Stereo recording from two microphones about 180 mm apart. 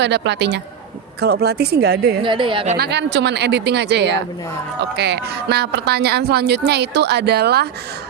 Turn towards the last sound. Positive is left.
turn(degrees=-60)  # may be behind; listen again after turning